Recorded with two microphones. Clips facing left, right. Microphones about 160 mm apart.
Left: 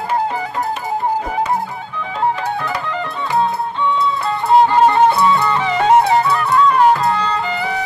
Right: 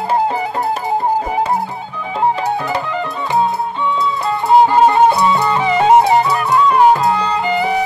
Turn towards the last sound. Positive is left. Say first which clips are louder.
# right 4 dB
turn(degrees=-15)  # may be behind; listen again after turning